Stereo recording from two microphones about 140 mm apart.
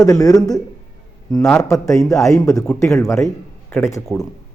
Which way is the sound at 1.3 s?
5° left (ahead or behind).